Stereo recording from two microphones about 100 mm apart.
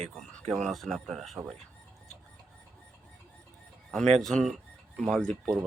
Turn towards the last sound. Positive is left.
turn(degrees=5)  # may be behind; listen again after turning